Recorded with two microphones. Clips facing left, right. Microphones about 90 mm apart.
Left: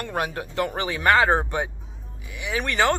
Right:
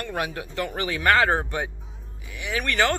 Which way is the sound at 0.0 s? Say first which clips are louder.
Left 2 dB; 30° left (ahead or behind).